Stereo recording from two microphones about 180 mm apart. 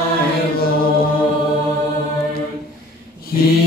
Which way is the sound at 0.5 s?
55° left (ahead or behind).